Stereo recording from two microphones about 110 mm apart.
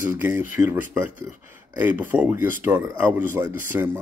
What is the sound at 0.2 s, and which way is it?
Speech, 20° right (ahead or behind).